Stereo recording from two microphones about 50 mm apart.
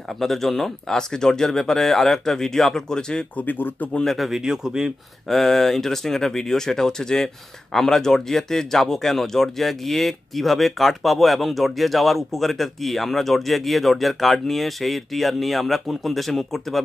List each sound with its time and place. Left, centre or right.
0.2 s speech: centre
3.3 s speech: left
4.0 s speech: centre
4.3 s a man's voice: centre
5.3 s speech: centre